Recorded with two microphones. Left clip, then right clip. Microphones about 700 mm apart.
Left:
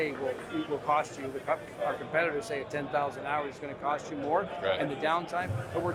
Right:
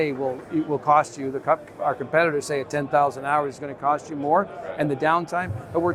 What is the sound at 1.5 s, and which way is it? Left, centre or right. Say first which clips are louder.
Speech: right 9 dB; right.